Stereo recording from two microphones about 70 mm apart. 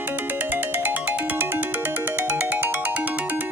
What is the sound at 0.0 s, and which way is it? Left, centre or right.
Ringtone, right.